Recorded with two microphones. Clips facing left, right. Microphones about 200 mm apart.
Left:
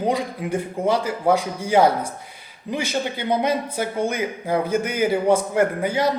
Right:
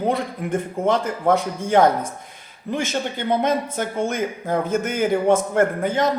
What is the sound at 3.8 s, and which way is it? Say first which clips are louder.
A man's voice: even; 15° left (ahead or behind).